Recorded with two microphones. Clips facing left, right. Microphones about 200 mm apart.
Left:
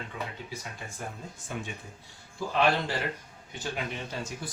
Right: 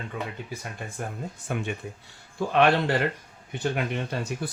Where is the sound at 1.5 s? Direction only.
65° right (ahead or behind).